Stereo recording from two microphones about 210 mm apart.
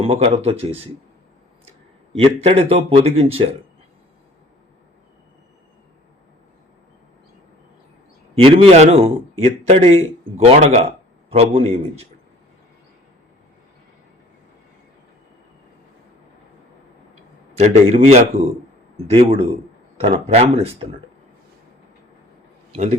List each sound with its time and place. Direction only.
0.0 s speech: 25° right (ahead or behind)
2.1 s speech: 25° right (ahead or behind)
8.4 s a man's voice: 30° right (ahead or behind)
17.6 s a man's voice: 30° right (ahead or behind)
22.7 s a man's voice: 30° right (ahead or behind)